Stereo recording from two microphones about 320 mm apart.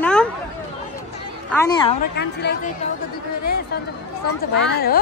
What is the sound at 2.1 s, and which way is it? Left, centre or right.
Speech, left.